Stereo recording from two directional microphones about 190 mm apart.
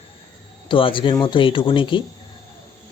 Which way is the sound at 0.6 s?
25° left (ahead or behind).